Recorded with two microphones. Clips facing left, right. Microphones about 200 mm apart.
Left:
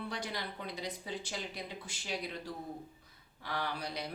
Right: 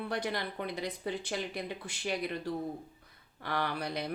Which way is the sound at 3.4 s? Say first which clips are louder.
Right 4 dB; 60° right (ahead or behind).